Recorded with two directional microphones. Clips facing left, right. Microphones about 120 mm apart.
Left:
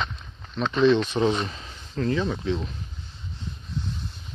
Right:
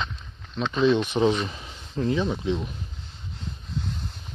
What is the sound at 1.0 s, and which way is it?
Speech, 15° right (ahead or behind).